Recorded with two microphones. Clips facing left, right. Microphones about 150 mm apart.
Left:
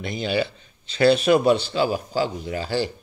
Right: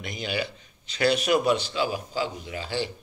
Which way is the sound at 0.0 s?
30° left (ahead or behind).